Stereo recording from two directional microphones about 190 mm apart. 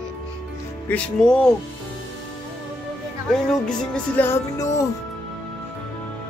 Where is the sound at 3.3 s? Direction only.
5° left (ahead or behind).